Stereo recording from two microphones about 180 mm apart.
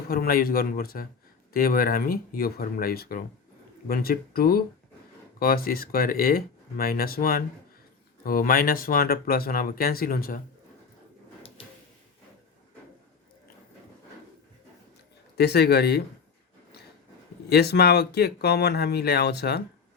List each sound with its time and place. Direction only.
0.1 s speech: 55° left (ahead or behind)
15.4 s speech: 65° left (ahead or behind)
17.5 s speech: 65° left (ahead or behind)